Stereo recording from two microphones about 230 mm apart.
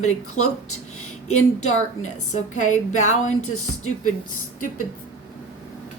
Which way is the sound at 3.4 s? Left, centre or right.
Left.